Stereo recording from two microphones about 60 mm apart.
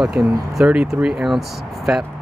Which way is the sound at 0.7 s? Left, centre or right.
Right.